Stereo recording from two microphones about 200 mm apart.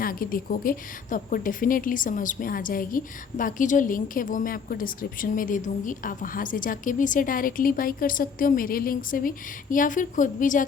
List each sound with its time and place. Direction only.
0.0 s a woman's voice: 45° left (ahead or behind)